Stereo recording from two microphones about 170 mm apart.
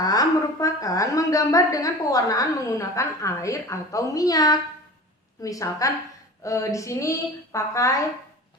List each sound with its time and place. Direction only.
0.0 s a woman's voice: 20° left (ahead or behind)